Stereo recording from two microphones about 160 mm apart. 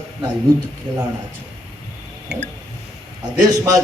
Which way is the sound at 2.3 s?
90° right.